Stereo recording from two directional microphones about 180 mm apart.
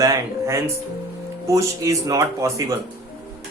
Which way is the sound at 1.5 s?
15° right (ahead or behind).